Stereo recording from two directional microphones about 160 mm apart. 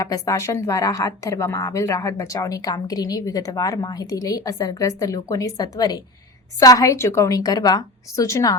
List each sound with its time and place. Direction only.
0.0 s a woman's voice: 20° left (ahead or behind)